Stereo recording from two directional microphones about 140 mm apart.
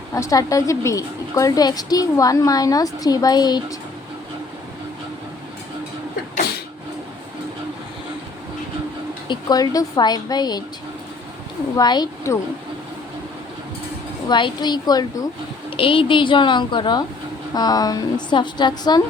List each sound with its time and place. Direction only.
0.1 s a woman's voice: 25° left (ahead or behind)
9.2 s a woman's voice: 30° left (ahead or behind)
11.8 s a woman's voice: 30° left (ahead or behind)
14.3 s a woman's voice: 35° left (ahead or behind)
15.7 s a woman's voice: 40° left (ahead or behind)